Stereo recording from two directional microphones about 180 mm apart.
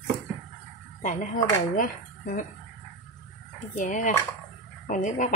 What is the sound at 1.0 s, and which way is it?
Speech, 45° left (ahead or behind).